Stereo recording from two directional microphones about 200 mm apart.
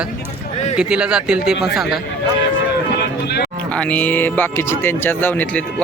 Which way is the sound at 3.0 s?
55° left (ahead or behind).